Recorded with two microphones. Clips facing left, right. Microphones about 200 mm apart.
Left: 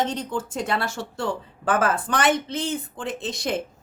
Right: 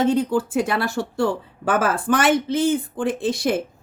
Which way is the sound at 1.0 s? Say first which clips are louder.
Right 7 dB; 25° left (ahead or behind).